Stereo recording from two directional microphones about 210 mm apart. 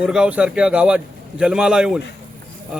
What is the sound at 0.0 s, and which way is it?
Speech, 5° right (ahead or behind).